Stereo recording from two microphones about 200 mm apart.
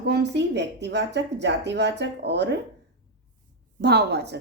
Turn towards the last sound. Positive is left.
turn(degrees=-55)  # may be behind; listen again after turning